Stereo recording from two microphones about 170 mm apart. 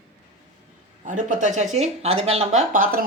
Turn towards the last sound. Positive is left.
turn(degrees=-50)  # may be behind; listen again after turning